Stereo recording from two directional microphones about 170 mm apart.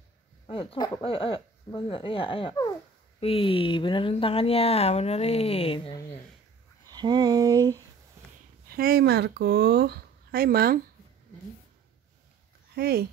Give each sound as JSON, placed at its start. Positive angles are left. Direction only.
{"t": 0.5, "sound": "speech", "side_deg": 30}
{"t": 6.9, "sound": "a sound", "side_deg": -25}
{"t": 8.6, "sound": "speech", "side_deg": -60}
{"t": 12.7, "sound": "speech", "side_deg": -65}